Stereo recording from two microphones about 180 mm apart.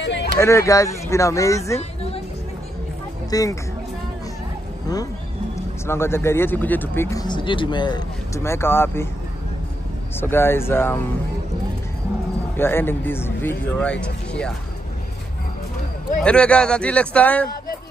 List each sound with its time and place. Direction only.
0.0 s a sound: 75° left (ahead or behind)
0.4 s speech: 15° left (ahead or behind)
1.8 s music: 35° left (ahead or behind)
3.3 s speech: 20° left (ahead or behind)
5.9 s speech: 15° left (ahead or behind)
10.2 s speech: 10° left (ahead or behind)
12.5 s speech: 10° left (ahead or behind)
16.2 s speech: 5° left (ahead or behind)